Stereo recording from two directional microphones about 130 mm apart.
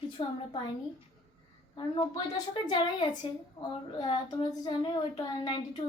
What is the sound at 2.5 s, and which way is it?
Speech, 35° left (ahead or behind).